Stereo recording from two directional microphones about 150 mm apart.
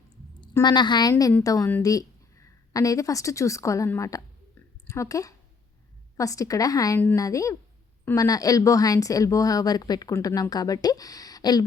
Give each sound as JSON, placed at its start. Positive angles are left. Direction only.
{"t": 0.6, "sound": "speech", "side_deg": 30}
{"t": 1.1, "sound": "a woman's voice", "side_deg": 15}